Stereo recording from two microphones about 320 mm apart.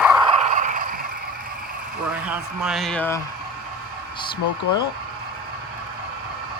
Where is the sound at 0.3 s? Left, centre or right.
Right.